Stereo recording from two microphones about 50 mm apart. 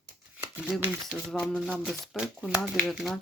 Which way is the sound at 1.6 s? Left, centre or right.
Centre.